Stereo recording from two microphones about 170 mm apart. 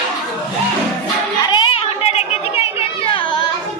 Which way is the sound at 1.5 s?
30° left (ahead or behind).